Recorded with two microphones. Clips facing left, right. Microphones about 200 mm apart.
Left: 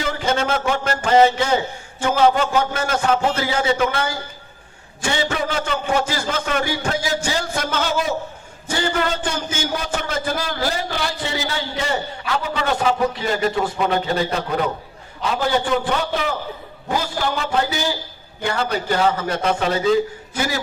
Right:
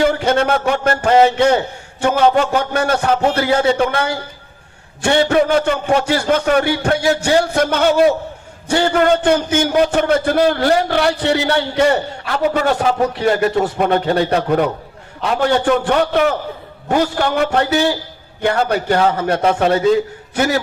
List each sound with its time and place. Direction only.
0.0 s a man's voice: 60° right (ahead or behind)
5.0 s a man's voice: 55° right (ahead or behind)
13.1 s a man's voice: 70° right (ahead or behind)
13.7 s a man's voice: 60° right (ahead or behind)
18.4 s a man's voice: 55° right (ahead or behind)